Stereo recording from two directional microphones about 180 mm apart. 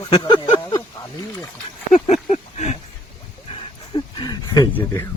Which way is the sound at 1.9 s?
40° left (ahead or behind).